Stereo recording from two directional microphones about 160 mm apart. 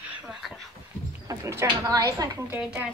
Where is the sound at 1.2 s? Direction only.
20° right (ahead or behind).